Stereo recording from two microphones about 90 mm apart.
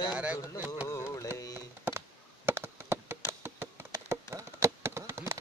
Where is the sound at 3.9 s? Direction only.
35° right (ahead or behind).